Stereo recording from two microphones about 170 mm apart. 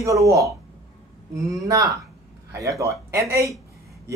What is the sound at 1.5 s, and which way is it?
Speech, 20° right (ahead or behind).